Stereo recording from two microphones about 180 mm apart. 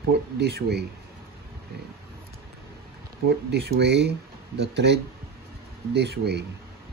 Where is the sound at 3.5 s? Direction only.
65° right (ahead or behind).